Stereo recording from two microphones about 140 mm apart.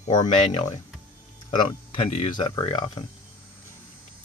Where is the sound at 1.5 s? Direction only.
35° left (ahead or behind).